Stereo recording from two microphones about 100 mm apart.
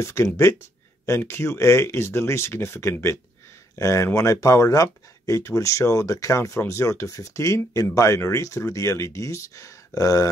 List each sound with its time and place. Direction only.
0.0 s speech: 30° left (ahead or behind)